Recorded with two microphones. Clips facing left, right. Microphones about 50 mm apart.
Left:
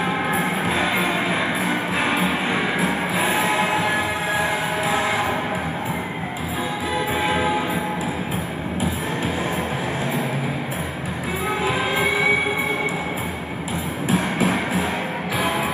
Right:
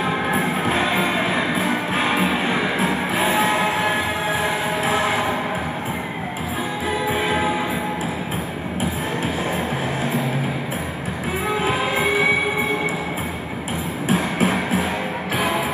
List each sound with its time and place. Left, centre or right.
0.7 s music: right
11.6 s music: right
14.0 s music: right